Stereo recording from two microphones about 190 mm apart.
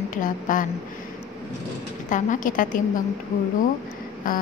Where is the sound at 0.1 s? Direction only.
45° left (ahead or behind).